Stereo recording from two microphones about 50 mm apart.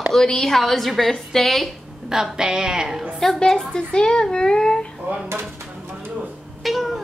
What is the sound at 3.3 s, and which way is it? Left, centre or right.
Speech, centre.